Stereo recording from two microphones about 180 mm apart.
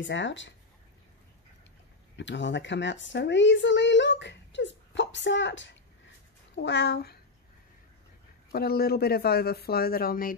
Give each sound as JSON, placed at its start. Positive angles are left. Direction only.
{"t": 0.0, "sound": "speech", "side_deg": 90}
{"t": 2.1, "sound": "speech", "side_deg": 80}
{"t": 6.5, "sound": "speech", "side_deg": 75}
{"t": 8.5, "sound": "speech", "side_deg": 60}